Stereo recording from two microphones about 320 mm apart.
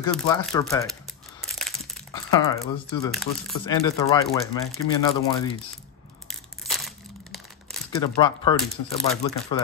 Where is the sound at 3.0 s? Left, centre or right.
Centre.